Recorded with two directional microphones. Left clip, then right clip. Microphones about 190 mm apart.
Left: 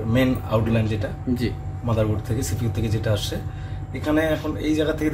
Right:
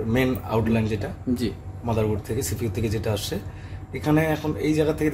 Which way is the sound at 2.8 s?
55° right (ahead or behind).